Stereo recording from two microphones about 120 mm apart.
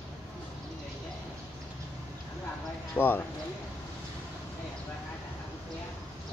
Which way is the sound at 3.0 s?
15° left (ahead or behind).